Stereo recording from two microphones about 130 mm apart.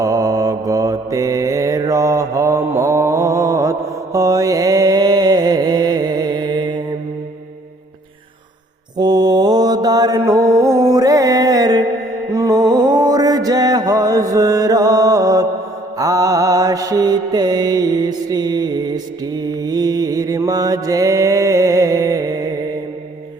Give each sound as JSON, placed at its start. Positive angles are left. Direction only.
{"t": 0.0, "sound": "mantra", "side_deg": -25}
{"t": 9.0, "sound": "mantra", "side_deg": -30}
{"t": 10.2, "sound": "music", "side_deg": -25}
{"t": 12.3, "sound": "mantra", "side_deg": -25}